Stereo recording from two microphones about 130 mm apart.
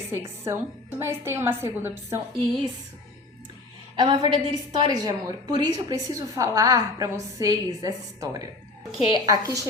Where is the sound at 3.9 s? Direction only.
35° right (ahead or behind).